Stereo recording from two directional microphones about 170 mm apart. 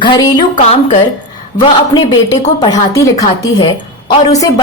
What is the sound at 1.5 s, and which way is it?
A woman's voice, 25° left (ahead or behind).